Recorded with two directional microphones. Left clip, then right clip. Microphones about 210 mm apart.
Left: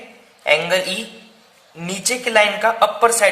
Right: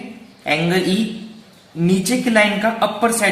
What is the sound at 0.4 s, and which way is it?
Speech, 30° left (ahead or behind).